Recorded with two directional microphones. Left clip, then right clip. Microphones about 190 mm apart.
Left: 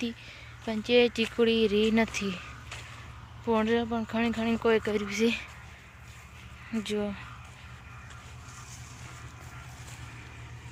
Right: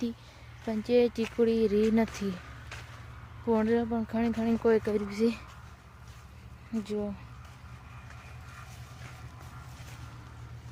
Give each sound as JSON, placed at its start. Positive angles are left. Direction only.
{"t": 0.7, "sound": "speech", "side_deg": -10}
{"t": 2.1, "sound": "a sound", "side_deg": -15}
{"t": 3.5, "sound": "speech", "side_deg": -20}
{"t": 6.7, "sound": "speech", "side_deg": 0}